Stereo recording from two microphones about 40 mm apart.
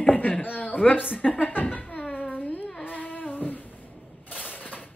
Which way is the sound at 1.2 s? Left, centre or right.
Left.